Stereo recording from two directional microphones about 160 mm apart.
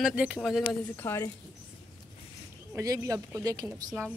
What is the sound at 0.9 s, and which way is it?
Speech, 15° left (ahead or behind).